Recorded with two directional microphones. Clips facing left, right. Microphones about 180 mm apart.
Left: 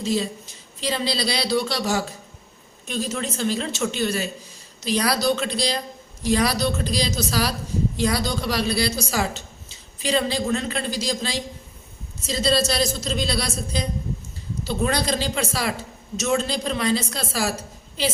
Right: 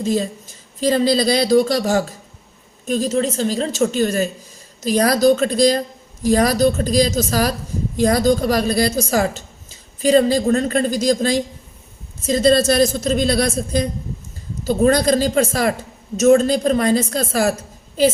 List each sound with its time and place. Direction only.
0.0 s a woman's voice: 45° right (ahead or behind)